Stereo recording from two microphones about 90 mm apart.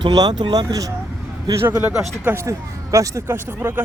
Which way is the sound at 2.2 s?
30° right (ahead or behind).